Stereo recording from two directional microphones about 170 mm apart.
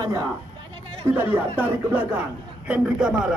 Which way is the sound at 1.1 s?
10° right (ahead or behind).